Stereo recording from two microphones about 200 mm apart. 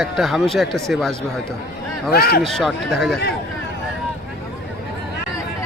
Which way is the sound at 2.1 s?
50° left (ahead or behind).